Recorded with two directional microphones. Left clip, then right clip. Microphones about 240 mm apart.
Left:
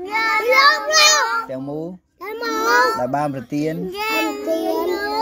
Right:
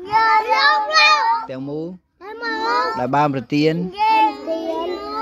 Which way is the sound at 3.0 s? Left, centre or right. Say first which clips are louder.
Right 3 dB; right.